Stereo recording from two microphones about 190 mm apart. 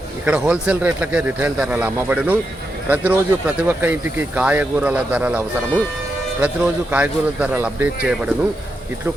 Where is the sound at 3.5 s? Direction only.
10° right (ahead or behind).